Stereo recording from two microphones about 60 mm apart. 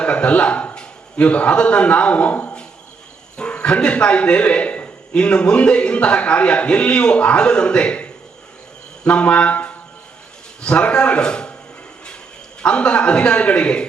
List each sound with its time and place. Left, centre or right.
0.0 s a man's voice: centre
9.0 s a sound: centre
10.6 s a man's voice: centre
12.6 s a man's voice: centre